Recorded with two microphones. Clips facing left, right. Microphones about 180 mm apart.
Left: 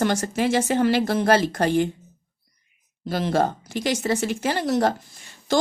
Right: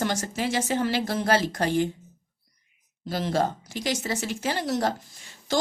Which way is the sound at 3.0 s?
60° left (ahead or behind).